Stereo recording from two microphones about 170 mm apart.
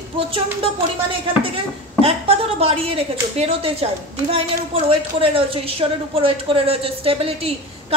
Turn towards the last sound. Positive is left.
turn(degrees=-35)  # may be behind; listen again after turning